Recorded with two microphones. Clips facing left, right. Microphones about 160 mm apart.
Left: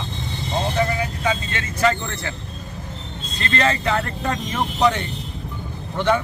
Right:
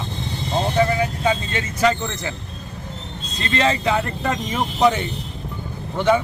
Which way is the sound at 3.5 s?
15° right (ahead or behind).